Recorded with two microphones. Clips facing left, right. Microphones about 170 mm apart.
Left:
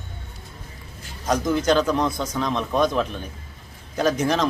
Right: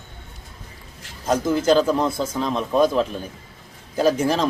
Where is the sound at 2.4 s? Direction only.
5° right (ahead or behind).